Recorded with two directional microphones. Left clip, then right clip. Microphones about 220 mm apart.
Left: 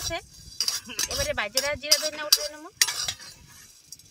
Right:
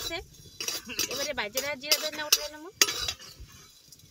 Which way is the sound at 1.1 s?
15° left (ahead or behind).